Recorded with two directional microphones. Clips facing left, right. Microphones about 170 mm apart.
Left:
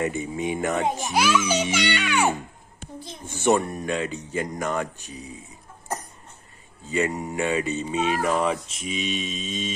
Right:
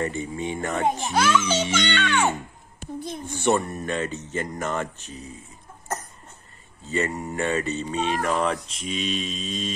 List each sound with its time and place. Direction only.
0.0 s a child's voice: 15° left (ahead or behind)
3.4 s mantra: 5° left (ahead or behind)
4.6 s mantra: centre (ahead or behind)
6.9 s mantra: 5° left (ahead or behind)